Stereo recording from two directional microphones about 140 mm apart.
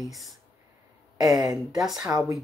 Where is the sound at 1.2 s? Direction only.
25° right (ahead or behind).